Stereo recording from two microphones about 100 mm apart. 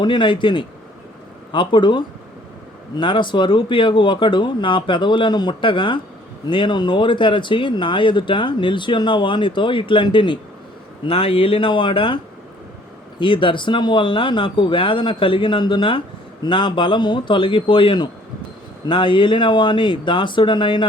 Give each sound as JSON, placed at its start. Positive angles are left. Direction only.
{"t": 0.0, "sound": "speech", "side_deg": 50}
{"t": 11.0, "sound": "speech", "side_deg": 70}